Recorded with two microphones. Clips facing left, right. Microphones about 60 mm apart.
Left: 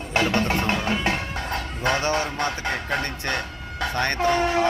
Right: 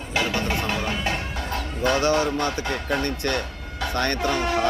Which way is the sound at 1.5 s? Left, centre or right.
Left.